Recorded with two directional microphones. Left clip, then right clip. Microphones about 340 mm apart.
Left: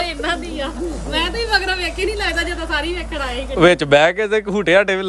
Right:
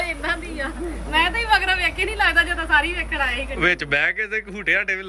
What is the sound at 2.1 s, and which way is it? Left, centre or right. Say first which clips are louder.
Speech: right 3 dB; centre.